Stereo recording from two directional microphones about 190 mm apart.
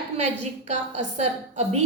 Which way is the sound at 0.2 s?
35° right (ahead or behind).